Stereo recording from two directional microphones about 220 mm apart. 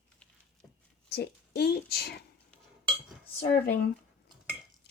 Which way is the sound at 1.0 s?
45° left (ahead or behind).